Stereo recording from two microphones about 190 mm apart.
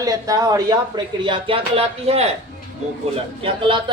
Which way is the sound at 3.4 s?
25° right (ahead or behind).